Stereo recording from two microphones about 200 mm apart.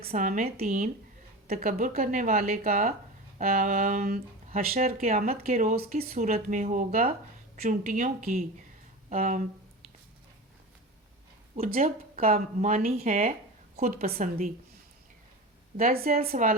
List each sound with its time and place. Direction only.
0.1 s speech: 40° right (ahead or behind)
11.6 s speech: 45° right (ahead or behind)
15.8 s speech: 45° right (ahead or behind)